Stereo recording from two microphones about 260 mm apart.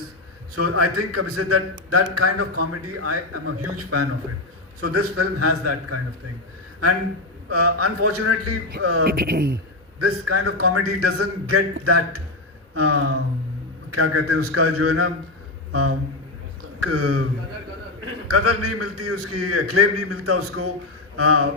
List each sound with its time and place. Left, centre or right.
0.5 s a man's voice: right
7.5 s a man's voice: right
9.0 s speech: right
10.0 s a man's voice: right